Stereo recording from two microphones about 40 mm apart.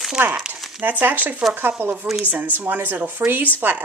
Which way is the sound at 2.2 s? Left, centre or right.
Right.